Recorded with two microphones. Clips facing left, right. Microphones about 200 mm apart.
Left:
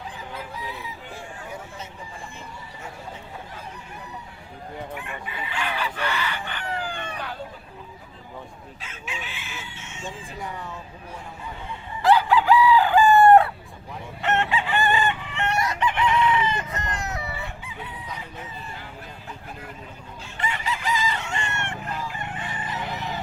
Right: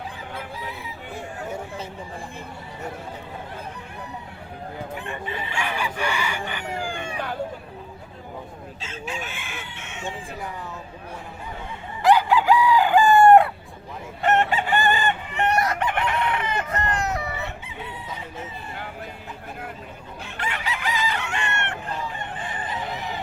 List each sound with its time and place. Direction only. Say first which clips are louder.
5.0 s chicken: right 4 dB; 30° right (ahead or behind)
5.5 s chicken: even; 10° right (ahead or behind)
9.0 s chicken: right 3 dB; 45° right (ahead or behind); by 10.2 s 60° right (ahead or behind)
12.0 s chicken: right 1 dB; 15° right (ahead or behind)
14.2 s chicken: right 3 dB; 45° right (ahead or behind)
15.5 s chicken: right 1 dB; 55° right (ahead or behind)
20.2 s chicken: left 1 dB; 65° right (ahead or behind)